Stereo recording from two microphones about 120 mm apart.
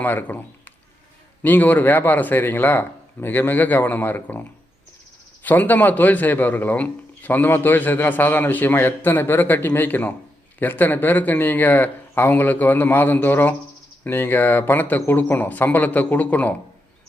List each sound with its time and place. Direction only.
0.0 s a man's voice: 15° left (ahead or behind)